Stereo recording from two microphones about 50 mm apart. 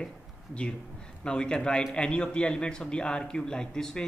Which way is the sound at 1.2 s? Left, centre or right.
Centre.